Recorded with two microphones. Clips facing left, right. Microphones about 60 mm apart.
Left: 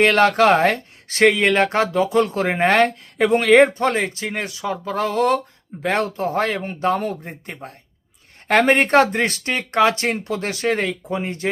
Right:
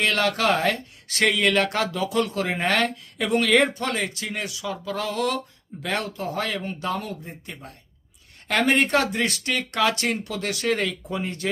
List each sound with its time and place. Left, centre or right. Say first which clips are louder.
0.0 s speech: left 8 dB; left